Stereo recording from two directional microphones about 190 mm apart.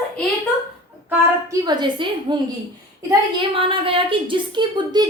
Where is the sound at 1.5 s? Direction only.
25° right (ahead or behind).